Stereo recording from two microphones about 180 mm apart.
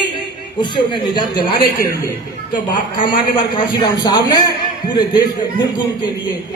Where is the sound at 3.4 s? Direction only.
25° left (ahead or behind).